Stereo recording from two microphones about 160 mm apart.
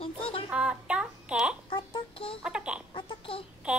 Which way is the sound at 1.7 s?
30° left (ahead or behind).